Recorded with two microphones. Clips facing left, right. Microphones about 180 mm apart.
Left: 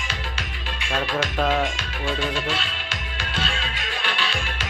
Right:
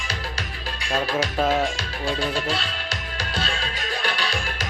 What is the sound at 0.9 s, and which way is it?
Music, 35° right (ahead or behind).